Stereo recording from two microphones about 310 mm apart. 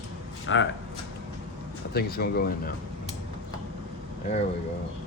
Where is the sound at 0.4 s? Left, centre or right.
Left.